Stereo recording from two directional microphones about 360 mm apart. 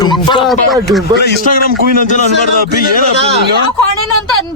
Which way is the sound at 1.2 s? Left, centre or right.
Left.